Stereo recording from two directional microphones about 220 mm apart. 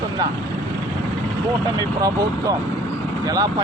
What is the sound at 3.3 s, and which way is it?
Speech, 15° right (ahead or behind).